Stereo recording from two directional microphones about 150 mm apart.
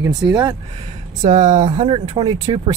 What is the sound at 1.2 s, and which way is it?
Speech, 55° right (ahead or behind).